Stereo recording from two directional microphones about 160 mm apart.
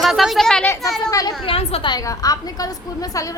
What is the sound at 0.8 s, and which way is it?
Speech, 20° left (ahead or behind).